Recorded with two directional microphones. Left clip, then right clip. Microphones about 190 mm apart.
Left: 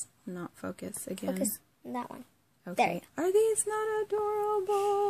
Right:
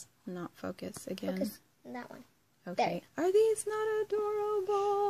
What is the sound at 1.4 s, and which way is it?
Speech, 45° left (ahead or behind).